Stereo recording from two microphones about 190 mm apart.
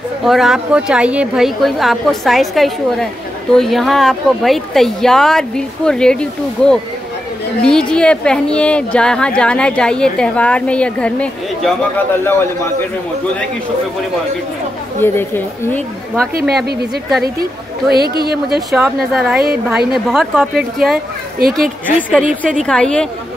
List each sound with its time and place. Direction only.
0.2 s a woman's voice: centre (ahead or behind)
15.0 s a woman's voice: 10° left (ahead or behind)
16.3 s a woman's voice: 60° right (ahead or behind)
19.1 s a woman's voice: centre (ahead or behind)
21.4 s a woman's voice: 50° right (ahead or behind)
22.7 s a woman's voice: 5° left (ahead or behind)